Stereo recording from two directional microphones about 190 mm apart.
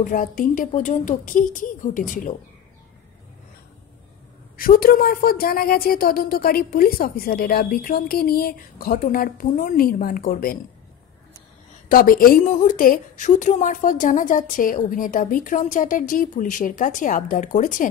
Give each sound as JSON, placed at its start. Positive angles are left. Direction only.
{"t": 0.0, "sound": "a woman's voice", "side_deg": 45}
{"t": 4.6, "sound": "a woman's voice", "side_deg": 50}
{"t": 11.9, "sound": "a woman's voice", "side_deg": 50}